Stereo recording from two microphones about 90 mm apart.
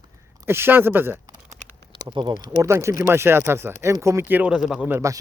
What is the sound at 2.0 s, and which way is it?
Speech, 55° right (ahead or behind).